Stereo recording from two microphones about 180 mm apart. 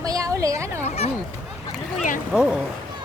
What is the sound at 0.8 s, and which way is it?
Speech, 35° left (ahead or behind).